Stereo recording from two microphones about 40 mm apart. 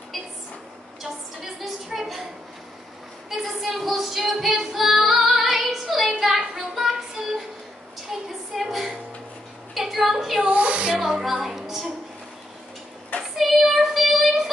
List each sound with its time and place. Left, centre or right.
1.0 s music: centre
3.3 s female singing: centre
6.2 s a sound: centre
8.1 s music: centre
9.8 s a sound: centre
10.4 s music: right
11.0 s music: centre
13.2 s child singing: centre